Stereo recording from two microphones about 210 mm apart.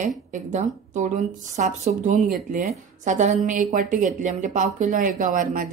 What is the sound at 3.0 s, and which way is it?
A woman's voice, 35° right (ahead or behind).